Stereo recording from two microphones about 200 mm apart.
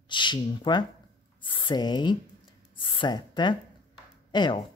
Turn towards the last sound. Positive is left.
turn(degrees=20)  # may be behind; listen again after turning